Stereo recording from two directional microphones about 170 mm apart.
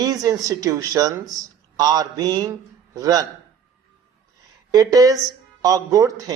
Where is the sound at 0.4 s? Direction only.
20° right (ahead or behind).